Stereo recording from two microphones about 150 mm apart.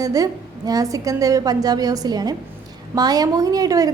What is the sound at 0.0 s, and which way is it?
A woman's voice, 25° right (ahead or behind).